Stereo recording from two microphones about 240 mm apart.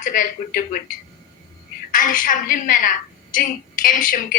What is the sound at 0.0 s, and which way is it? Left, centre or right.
Speech, left.